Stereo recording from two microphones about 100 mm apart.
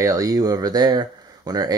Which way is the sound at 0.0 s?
35° right (ahead or behind).